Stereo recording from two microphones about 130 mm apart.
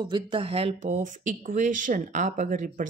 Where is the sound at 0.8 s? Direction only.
75° right (ahead or behind); by 2.8 s 90° right.